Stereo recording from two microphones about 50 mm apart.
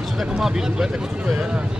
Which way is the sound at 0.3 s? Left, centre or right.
Centre.